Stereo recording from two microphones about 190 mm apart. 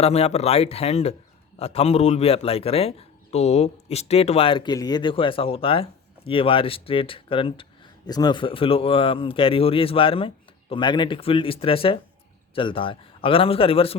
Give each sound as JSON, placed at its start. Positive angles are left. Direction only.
{"t": 0.0, "sound": "a man's voice", "side_deg": 35}